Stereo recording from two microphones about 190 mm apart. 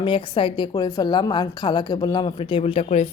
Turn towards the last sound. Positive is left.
turn(degrees=35)  # may be behind; listen again after turning